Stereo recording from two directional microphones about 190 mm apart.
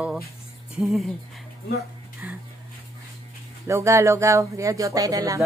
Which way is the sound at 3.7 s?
15° right (ahead or behind).